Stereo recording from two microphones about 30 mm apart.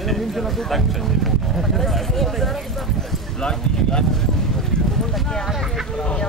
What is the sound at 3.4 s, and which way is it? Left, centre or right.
Speech, left.